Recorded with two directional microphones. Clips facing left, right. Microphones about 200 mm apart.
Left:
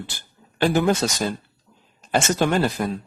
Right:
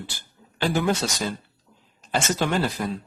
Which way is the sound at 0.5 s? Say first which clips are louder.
Left 5 dB; 50° left (ahead or behind).